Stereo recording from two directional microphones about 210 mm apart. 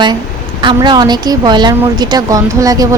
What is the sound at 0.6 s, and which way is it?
A woman's voice, 20° right (ahead or behind).